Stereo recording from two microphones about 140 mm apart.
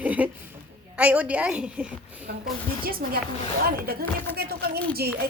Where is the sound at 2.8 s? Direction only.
90° right.